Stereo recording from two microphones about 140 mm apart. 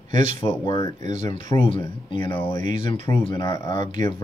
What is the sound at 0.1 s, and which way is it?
Speech, 40° left (ahead or behind).